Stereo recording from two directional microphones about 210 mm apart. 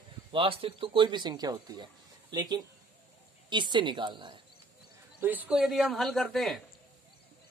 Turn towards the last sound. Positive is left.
turn(degrees=0)  # may be behind; listen again after turning